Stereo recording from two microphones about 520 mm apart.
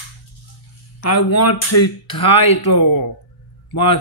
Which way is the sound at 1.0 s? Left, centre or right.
Left.